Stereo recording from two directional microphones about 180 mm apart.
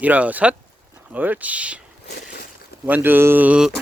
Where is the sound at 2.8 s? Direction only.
10° right (ahead or behind).